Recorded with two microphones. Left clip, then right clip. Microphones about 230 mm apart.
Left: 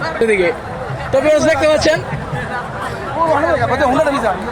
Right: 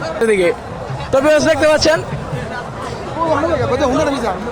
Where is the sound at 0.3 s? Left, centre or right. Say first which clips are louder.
Right 3 dB; right.